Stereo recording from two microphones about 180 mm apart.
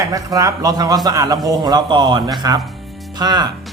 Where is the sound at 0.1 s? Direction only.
20° right (ahead or behind).